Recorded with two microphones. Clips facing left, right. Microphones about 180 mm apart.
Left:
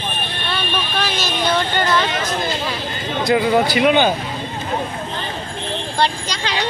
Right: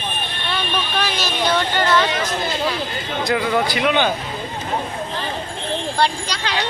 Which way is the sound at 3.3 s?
25° left (ahead or behind).